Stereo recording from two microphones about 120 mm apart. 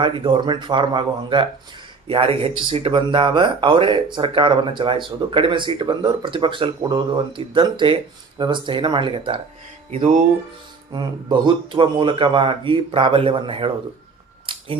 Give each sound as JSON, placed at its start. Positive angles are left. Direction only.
{"t": 0.0, "sound": "speech", "side_deg": -40}
{"t": 9.9, "sound": "music", "side_deg": -80}
{"t": 10.9, "sound": "speech", "side_deg": -40}
{"t": 14.5, "sound": "a sound", "side_deg": -45}